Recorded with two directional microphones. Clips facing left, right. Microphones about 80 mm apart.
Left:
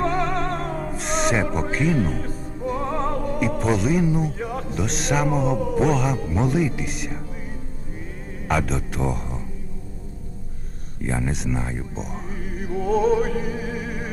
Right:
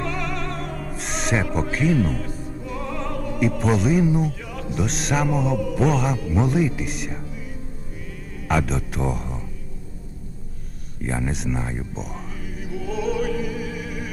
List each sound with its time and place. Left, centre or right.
0.0 s music: left
0.9 s owl: centre
1.7 s speech: centre
2.0 s music: left
3.4 s speech: centre
4.4 s music: left
4.7 s speech: centre
8.4 s a man's voice: centre
11.0 s speech: centre
12.2 s opera: left